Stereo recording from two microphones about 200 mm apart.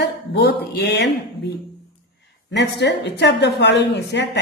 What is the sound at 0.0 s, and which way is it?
Speech, 55° left (ahead or behind).